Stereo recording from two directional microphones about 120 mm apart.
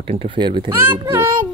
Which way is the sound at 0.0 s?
50° right (ahead or behind).